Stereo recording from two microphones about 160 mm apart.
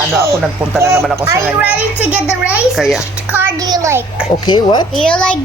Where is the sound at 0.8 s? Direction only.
15° right (ahead or behind).